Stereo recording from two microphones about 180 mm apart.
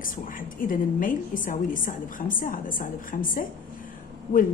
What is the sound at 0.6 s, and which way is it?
Speech, 50° left (ahead or behind).